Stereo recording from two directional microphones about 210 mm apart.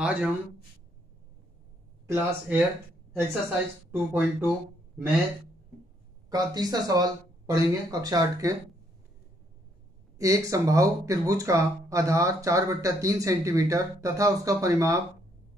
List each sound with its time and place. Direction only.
0.0 s speech: 5° right (ahead or behind)
2.0 s speech: 10° right (ahead or behind)
6.3 s speech: 20° right (ahead or behind)
10.1 s speech: 15° right (ahead or behind)